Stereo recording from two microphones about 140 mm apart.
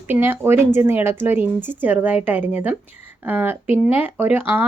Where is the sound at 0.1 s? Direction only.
15° right (ahead or behind).